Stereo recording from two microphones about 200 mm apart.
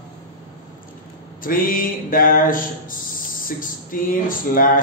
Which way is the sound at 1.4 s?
45° left (ahead or behind).